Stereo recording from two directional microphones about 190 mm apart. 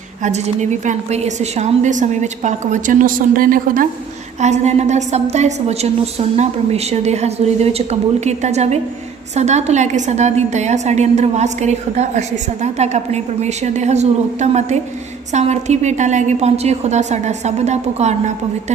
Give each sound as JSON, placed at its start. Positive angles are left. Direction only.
{"t": 0.2, "sound": "a woman's voice", "side_deg": -35}
{"t": 4.4, "sound": "a woman's voice", "side_deg": -35}